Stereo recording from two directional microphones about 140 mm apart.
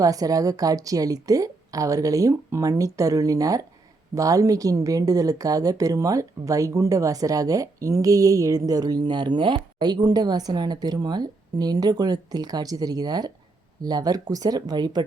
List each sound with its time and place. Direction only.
0.0 s speech: 25° right (ahead or behind)